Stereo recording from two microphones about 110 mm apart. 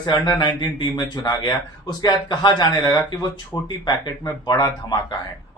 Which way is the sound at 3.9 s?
40° left (ahead or behind).